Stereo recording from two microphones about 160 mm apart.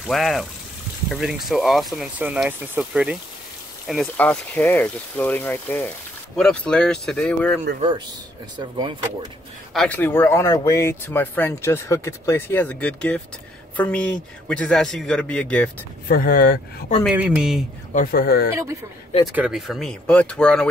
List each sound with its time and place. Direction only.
0.0 s speech: centre (ahead or behind)
4.2 s speech: 10° left (ahead or behind)
8.5 s speech: 25° right (ahead or behind)
9.8 s speech: 10° left (ahead or behind)
16.1 s speech: 70° left (ahead or behind)
17.1 s speech: 5° right (ahead or behind)
17.9 s speech: 70° left (ahead or behind)
19.3 s speech: 5° right (ahead or behind)